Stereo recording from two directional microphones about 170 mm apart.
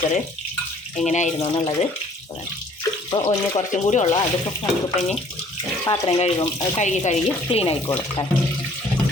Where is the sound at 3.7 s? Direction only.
45° left (ahead or behind).